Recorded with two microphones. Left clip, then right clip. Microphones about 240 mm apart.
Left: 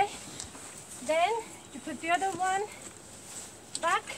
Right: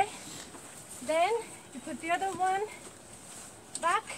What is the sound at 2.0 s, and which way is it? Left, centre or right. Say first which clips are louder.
Speech: left 1 dB; centre.